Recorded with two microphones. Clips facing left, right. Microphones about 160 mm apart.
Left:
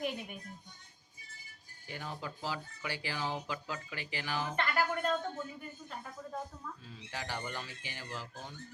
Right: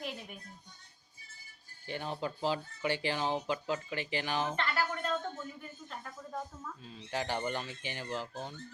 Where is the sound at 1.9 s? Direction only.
25° right (ahead or behind).